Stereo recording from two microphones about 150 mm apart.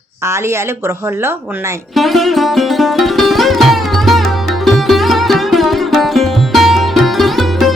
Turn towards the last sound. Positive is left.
turn(degrees=0)  # may be behind; listen again after turning